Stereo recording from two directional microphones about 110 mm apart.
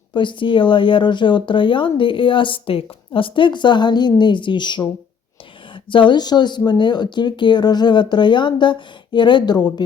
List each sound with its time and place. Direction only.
0.1 s speech: 45° left (ahead or behind)